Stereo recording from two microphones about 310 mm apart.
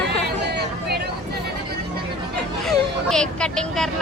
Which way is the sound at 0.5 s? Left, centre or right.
Right.